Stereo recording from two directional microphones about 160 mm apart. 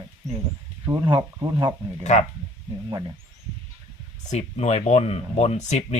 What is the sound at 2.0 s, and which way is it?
Speech, 45° left (ahead or behind).